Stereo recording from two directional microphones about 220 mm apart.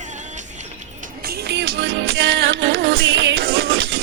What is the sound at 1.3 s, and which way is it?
Music, 50° right (ahead or behind).